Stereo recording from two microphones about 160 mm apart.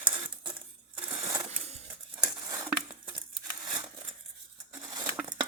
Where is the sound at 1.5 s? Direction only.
40° right (ahead or behind).